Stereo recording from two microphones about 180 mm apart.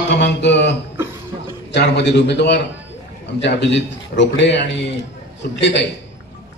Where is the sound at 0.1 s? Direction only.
75° left (ahead or behind).